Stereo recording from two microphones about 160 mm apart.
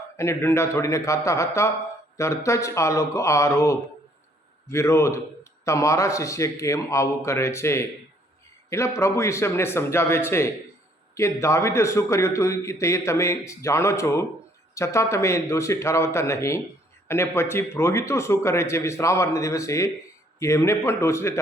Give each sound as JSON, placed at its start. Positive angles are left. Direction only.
{"t": 0.2, "sound": "a man's voice", "side_deg": 15}